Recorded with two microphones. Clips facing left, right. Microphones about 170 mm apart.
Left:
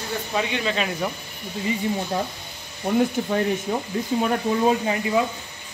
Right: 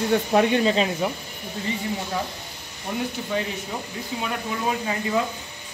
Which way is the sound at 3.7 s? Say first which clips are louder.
Left 7 dB; 45° left (ahead or behind).